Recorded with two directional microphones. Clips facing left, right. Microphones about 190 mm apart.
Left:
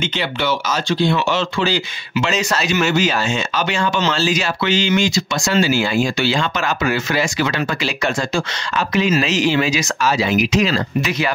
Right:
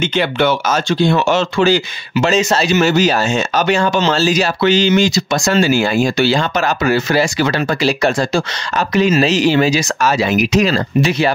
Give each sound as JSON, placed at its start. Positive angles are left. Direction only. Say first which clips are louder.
{"t": 0.2, "sound": "speech", "louder": "right 7 dB", "side_deg": -55}
{"t": 2.2, "sound": "speech", "louder": "right 7 dB", "side_deg": -30}
{"t": 10.0, "sound": "speech", "louder": "right 2 dB", "side_deg": -50}
{"t": 11.1, "sound": "speech", "louder": "right 5 dB", "side_deg": -30}